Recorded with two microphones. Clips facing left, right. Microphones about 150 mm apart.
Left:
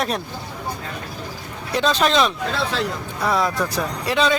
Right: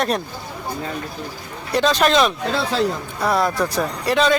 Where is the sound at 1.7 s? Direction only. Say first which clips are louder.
Right 2 dB; centre (ahead or behind).